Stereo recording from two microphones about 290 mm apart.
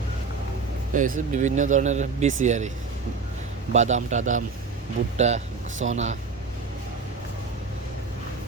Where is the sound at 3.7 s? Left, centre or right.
Right.